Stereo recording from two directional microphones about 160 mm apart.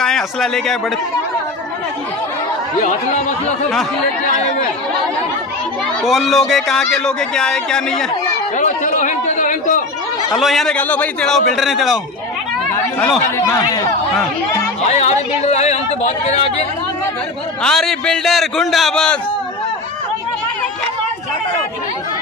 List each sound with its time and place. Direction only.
0.0 s speech: centre (ahead or behind)
2.8 s speech: 45° left (ahead or behind)
6.0 s speech: centre (ahead or behind)
8.5 s chatter: 50° left (ahead or behind)
10.3 s speech: centre (ahead or behind)
13.5 s speech: 20° left (ahead or behind)
14.9 s a sound: 45° left (ahead or behind)
16.3 s speech: 35° left (ahead or behind)
17.6 s speech: 5° left (ahead or behind)